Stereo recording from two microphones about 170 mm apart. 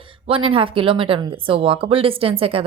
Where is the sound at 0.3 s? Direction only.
30° right (ahead or behind).